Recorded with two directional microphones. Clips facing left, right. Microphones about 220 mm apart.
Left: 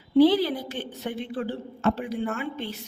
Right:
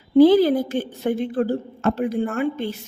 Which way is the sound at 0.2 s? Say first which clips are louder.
Right 6 dB; 45° right (ahead or behind).